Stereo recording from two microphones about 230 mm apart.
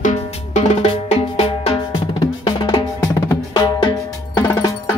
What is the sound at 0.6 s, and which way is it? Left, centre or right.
Drum, left.